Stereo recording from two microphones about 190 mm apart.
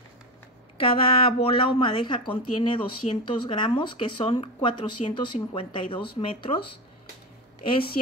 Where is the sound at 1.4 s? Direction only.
30° left (ahead or behind).